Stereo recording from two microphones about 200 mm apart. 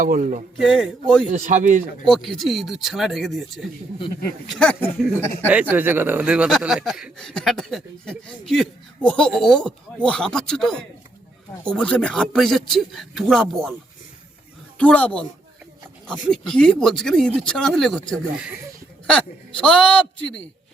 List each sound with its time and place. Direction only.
0.0 s speech: 40° right (ahead or behind)
2.0 s speech: centre (ahead or behind)
5.5 s speech: 10° right (ahead or behind)
14.8 s speech: 5° left (ahead or behind)
16.3 s speech: 5° left (ahead or behind)